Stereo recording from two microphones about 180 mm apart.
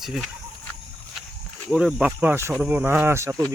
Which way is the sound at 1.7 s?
Centre (ahead or behind).